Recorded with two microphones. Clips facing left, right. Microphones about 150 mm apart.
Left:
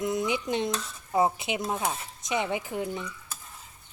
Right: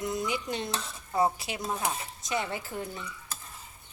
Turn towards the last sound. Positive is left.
turn(degrees=15)  # may be behind; listen again after turning